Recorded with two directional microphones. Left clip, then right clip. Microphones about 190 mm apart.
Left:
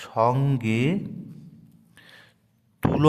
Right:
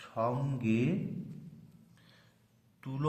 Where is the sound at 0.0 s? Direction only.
50° left (ahead or behind).